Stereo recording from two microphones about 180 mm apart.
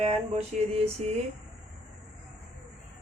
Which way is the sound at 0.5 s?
45° right (ahead or behind).